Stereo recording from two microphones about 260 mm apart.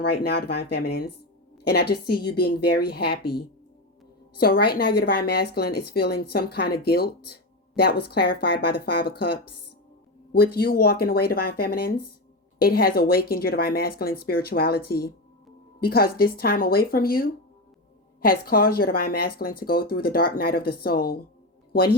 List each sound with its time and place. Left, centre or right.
0.0 s speech: left
4.4 s speech: left